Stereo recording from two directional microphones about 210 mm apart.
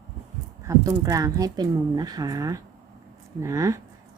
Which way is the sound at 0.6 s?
15° right (ahead or behind).